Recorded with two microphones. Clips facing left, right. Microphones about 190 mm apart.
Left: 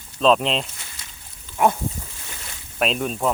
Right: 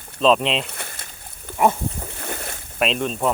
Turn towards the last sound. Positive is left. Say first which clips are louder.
# right 1 dB
turn(degrees=5)  # may be behind; listen again after turning